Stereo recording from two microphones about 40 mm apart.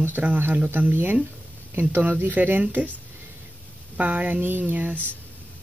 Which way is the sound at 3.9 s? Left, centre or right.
Right.